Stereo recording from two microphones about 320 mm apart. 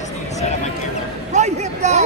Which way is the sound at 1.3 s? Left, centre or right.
Right.